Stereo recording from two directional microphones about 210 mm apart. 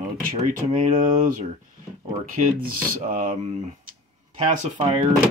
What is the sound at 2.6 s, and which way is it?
Speech, 40° right (ahead or behind).